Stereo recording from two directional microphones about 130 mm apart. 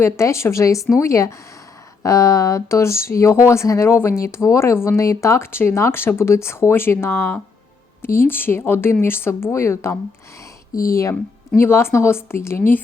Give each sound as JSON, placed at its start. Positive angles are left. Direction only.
{"t": 0.0, "sound": "speech", "side_deg": 20}